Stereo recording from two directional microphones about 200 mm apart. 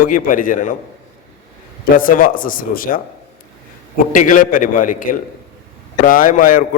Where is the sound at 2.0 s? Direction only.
45° left (ahead or behind).